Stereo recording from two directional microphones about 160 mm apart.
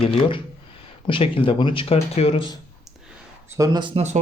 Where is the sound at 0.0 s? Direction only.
35° left (ahead or behind).